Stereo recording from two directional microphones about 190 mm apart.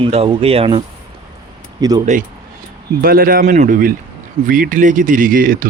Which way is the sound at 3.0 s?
50° right (ahead or behind).